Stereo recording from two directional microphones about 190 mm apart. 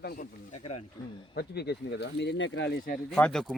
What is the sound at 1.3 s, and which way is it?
Speech, 60° left (ahead or behind).